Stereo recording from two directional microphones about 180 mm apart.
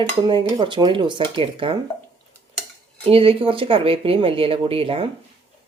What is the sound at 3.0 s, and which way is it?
Speech, 30° right (ahead or behind).